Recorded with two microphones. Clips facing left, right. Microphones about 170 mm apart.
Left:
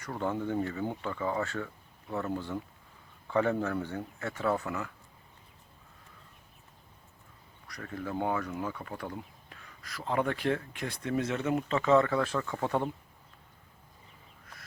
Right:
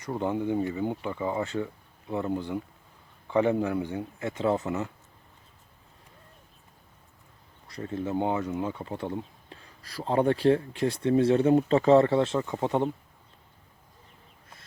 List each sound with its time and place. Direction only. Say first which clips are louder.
0.0 s speech: right 4 dB; 20° right (ahead or behind)
7.7 s speech: right 6 dB; 25° right (ahead or behind)